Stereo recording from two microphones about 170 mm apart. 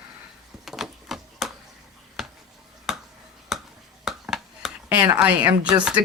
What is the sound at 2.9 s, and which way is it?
Finger snapping, centre (ahead or behind).